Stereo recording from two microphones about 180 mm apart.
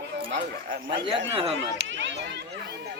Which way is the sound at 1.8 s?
90° right.